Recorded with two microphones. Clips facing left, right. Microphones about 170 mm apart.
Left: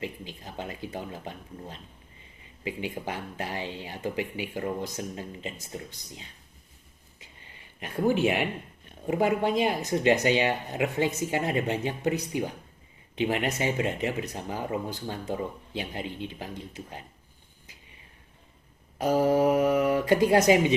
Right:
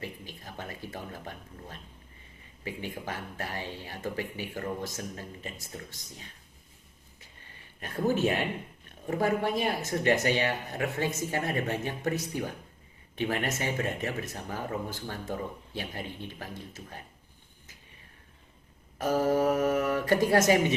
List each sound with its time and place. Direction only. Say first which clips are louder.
0.0 s speech: left 4 dB; 15° left (ahead or behind)
7.8 s speech: left 3 dB; 15° left (ahead or behind)
18.9 s speech: left 3 dB; 15° left (ahead or behind)